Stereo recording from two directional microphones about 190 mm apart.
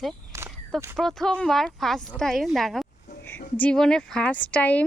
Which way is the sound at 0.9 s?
Centre (ahead or behind).